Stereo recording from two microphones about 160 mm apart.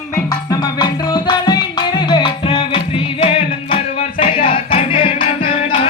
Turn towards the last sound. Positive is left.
turn(degrees=35)  # may be behind; listen again after turning